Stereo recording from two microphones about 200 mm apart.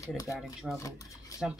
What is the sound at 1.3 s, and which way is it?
Stir, 15° left (ahead or behind).